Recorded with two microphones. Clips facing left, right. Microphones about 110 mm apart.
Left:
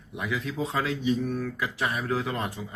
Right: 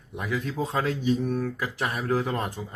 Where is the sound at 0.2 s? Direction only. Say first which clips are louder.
Right 1 dB; 40° right (ahead or behind).